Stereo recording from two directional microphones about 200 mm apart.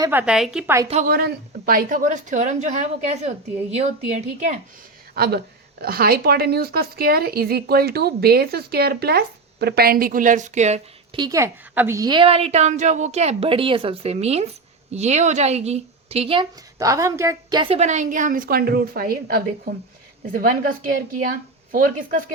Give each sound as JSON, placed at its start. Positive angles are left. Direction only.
{"t": 0.0, "sound": "a woman's voice", "side_deg": -10}
{"t": 1.0, "sound": "a woman's voice", "side_deg": -45}
{"t": 5.1, "sound": "speech", "side_deg": -50}
{"t": 11.2, "sound": "a woman's voice", "side_deg": -15}
{"t": 16.7, "sound": "a woman's voice", "side_deg": -15}